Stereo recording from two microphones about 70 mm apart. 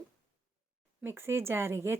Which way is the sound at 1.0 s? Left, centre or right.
Right.